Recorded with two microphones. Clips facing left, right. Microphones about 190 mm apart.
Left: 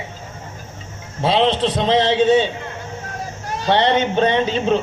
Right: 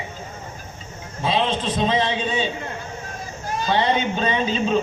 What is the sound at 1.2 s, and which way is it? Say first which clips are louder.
A man's voice: left 5 dB; 70° left (ahead or behind).